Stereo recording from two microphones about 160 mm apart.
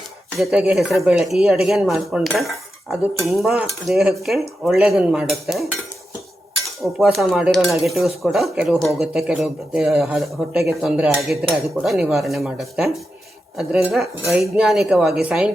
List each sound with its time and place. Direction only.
0.3 s speech: 10° right (ahead or behind)
6.8 s speech: centre (ahead or behind)